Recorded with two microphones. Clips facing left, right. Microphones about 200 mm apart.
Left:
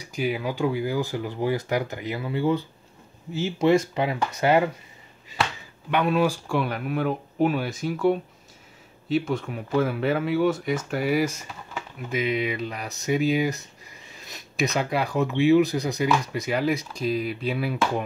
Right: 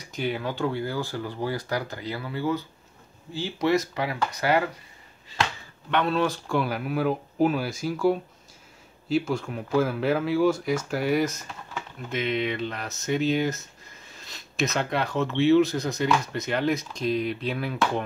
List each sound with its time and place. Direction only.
0.0 s speech: 10° left (ahead or behind); by 4.6 s 25° left (ahead or behind)
5.9 s speech: 10° left (ahead or behind)